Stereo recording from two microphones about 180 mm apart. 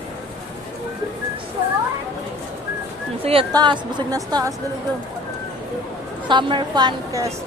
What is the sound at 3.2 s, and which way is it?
Speech, 30° right (ahead or behind).